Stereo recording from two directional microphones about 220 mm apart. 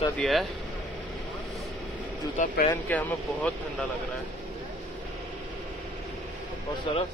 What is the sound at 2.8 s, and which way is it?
Speech, 5° left (ahead or behind).